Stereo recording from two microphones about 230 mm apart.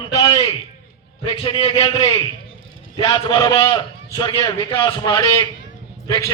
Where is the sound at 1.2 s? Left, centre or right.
Left.